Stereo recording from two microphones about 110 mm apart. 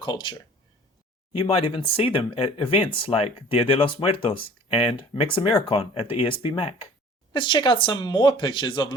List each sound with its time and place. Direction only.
0.0 s speech: 45° left (ahead or behind)
1.3 s speech: 60° left (ahead or behind)
7.3 s speech: 45° left (ahead or behind)